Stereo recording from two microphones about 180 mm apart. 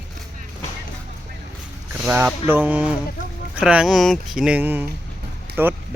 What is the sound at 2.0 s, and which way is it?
Speech, 5° right (ahead or behind).